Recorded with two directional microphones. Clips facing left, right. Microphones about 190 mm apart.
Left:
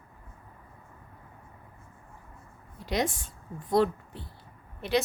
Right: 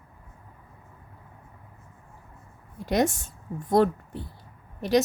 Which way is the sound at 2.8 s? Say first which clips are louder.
Right 5 dB; 45° right (ahead or behind).